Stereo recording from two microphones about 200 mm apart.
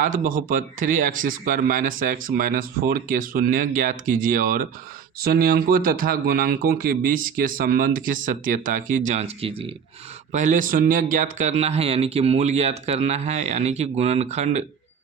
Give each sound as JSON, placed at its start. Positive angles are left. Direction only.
{"t": 0.0, "sound": "speech", "side_deg": -40}
{"t": 10.3, "sound": "speech", "side_deg": -40}